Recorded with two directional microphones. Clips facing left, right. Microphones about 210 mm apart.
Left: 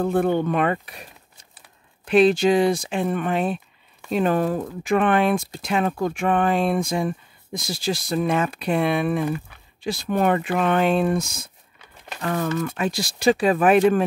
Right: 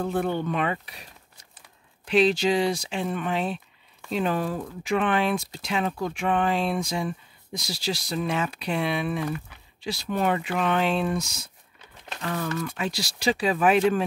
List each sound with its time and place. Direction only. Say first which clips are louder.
0.0 s speech: left 6 dB; 50° left (ahead or behind)
2.0 s speech: left 5 dB; 55° left (ahead or behind)